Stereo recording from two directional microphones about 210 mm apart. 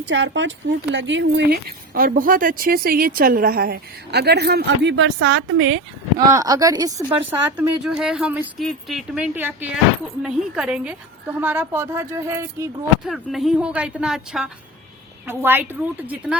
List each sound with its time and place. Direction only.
0.0 s speech: 60° right (ahead or behind)
6.1 s speech: 15° right (ahead or behind)
7.5 s a woman's voice: 5° right (ahead or behind)
13.1 s a woman's voice: centre (ahead or behind)